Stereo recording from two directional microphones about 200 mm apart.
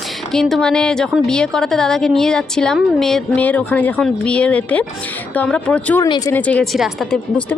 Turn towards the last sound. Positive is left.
turn(degrees=0)  # may be behind; listen again after turning